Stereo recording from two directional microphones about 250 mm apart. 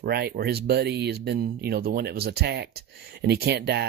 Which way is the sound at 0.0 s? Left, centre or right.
Right.